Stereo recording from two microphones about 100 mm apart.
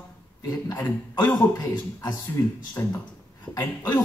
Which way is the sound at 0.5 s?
35° left (ahead or behind).